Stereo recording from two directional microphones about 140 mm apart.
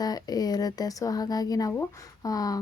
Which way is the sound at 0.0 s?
30° left (ahead or behind).